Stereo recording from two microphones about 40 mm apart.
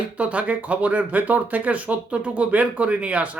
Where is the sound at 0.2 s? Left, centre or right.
Right.